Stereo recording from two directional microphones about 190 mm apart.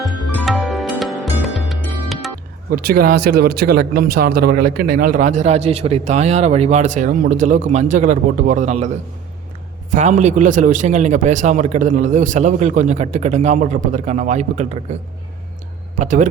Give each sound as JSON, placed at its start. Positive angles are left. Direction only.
{"t": 0.0, "sound": "music", "side_deg": 0}
{"t": 2.6, "sound": "speech", "side_deg": -50}
{"t": 9.9, "sound": "speech", "side_deg": -40}
{"t": 16.0, "sound": "speech", "side_deg": -40}